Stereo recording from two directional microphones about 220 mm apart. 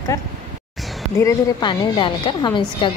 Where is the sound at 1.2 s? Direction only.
20° left (ahead or behind).